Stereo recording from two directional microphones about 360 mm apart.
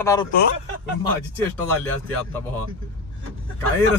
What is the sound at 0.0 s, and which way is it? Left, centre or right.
Speech, centre.